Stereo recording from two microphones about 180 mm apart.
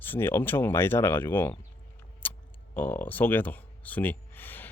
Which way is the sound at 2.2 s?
10° left (ahead or behind).